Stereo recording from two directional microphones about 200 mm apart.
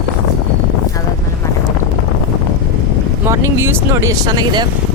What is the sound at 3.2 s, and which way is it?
Speech, 15° right (ahead or behind).